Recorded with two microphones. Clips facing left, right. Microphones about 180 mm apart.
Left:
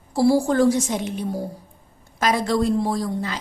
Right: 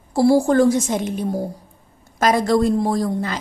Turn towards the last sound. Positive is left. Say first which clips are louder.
# right 4 dB
turn(degrees=-50)  # may be behind; listen again after turning